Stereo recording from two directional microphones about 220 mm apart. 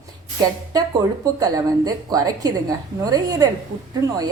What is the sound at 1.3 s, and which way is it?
A woman's voice, 15° right (ahead or behind).